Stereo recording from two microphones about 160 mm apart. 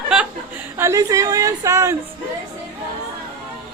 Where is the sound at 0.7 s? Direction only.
20° right (ahead or behind).